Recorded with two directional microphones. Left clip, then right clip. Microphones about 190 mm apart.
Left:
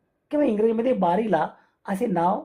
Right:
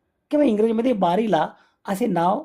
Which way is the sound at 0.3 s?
40° right (ahead or behind).